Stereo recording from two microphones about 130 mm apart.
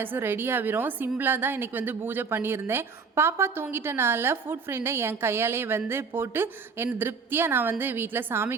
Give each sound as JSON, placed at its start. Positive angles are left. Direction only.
{"t": 0.0, "sound": "a woman's voice", "side_deg": -15}